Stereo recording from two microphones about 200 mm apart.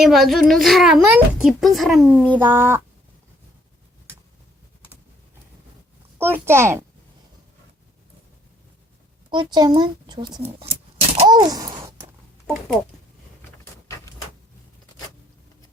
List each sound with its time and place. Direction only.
0.0 s a child's voice: centre (ahead or behind)
6.1 s a child's voice: 10° right (ahead or behind)
9.3 s a child's voice: 20° right (ahead or behind)
13.8 s door: 15° left (ahead or behind)